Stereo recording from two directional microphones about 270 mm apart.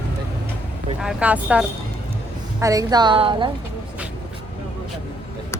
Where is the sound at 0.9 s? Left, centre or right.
Centre.